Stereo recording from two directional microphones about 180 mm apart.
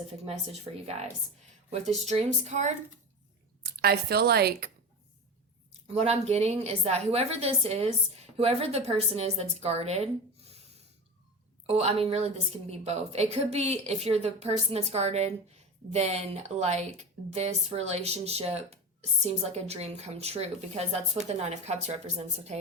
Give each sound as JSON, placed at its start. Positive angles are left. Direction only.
{"t": 2.0, "sound": "a woman's voice", "side_deg": -40}
{"t": 3.6, "sound": "a woman's voice", "side_deg": -60}
{"t": 5.9, "sound": "a woman's voice", "side_deg": -35}